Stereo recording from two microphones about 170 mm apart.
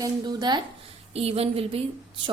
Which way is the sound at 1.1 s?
35° right (ahead or behind).